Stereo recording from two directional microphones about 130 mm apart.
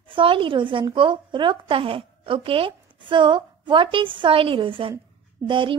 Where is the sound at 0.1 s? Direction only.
40° right (ahead or behind).